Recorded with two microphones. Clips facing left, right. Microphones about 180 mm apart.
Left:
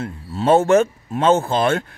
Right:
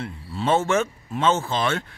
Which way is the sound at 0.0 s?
45° left (ahead or behind).